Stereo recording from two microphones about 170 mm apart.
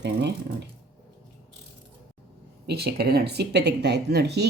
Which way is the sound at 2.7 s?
70° right (ahead or behind).